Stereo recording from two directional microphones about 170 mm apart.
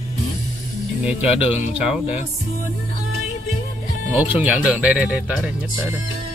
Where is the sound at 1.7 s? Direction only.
5° right (ahead or behind).